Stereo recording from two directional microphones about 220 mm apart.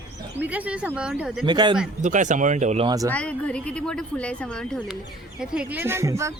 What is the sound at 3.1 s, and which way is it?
Speech, 5° left (ahead or behind).